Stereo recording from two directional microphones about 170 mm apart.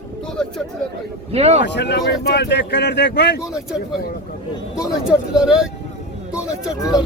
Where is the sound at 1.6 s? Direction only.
85° left.